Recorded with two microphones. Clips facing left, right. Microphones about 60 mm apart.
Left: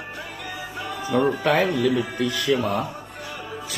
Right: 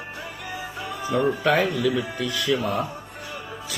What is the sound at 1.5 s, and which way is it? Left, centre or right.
Speech, left.